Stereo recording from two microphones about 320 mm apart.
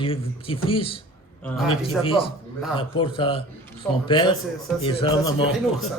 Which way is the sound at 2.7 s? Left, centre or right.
Centre.